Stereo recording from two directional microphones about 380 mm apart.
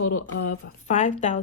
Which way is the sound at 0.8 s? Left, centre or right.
Centre.